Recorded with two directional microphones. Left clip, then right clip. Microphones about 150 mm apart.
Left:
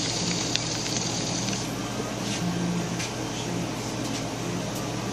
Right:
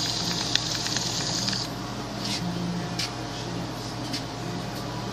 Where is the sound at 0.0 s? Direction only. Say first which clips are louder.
Even; 30° right (ahead or behind).